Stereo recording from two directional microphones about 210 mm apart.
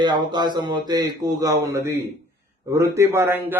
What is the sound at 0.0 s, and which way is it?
A man's voice, 20° right (ahead or behind).